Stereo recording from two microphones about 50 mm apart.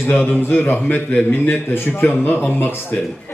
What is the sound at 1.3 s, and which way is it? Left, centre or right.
Speech, left.